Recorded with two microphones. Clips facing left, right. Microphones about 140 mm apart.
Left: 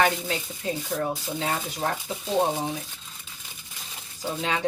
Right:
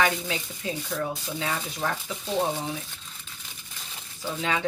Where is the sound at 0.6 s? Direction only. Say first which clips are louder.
Left 3 dB; 35° left (ahead or behind).